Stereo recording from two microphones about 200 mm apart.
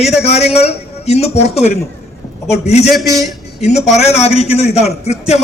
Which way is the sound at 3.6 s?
35° left (ahead or behind).